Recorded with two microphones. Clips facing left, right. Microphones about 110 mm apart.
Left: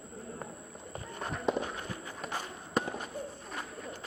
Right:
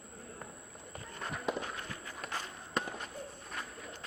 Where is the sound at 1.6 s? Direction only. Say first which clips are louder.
Left 4 dB; 20° left (ahead or behind).